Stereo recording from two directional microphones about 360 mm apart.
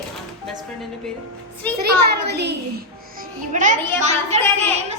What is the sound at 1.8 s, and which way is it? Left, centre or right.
A child's voice, right.